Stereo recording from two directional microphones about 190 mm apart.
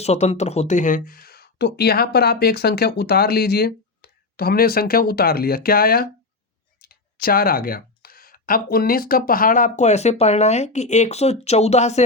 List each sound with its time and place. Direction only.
0.0 s speech: 35° left (ahead or behind)